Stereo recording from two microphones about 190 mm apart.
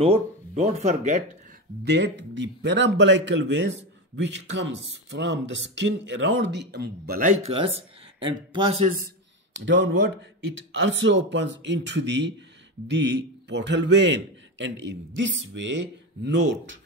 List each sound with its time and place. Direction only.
0.0 s speech: 35° right (ahead or behind)
1.9 s a man's voice: 70° right (ahead or behind); by 7.3 s 50° right (ahead or behind)
7.4 s speech: 30° right (ahead or behind)
8.8 s a man's voice: 50° right (ahead or behind)
9.7 s a man's voice: 80° right